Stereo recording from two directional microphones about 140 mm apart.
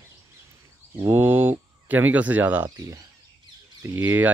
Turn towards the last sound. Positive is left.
turn(degrees=-15)  # may be behind; listen again after turning